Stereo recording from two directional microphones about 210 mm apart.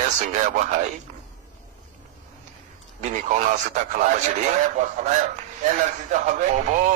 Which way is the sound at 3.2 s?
35° right (ahead or behind).